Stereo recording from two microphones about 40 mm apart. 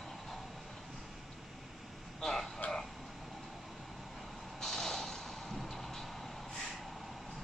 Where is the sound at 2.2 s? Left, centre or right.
Centre.